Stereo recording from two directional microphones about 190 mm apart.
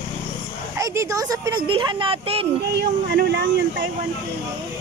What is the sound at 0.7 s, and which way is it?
Speech, 15° right (ahead or behind).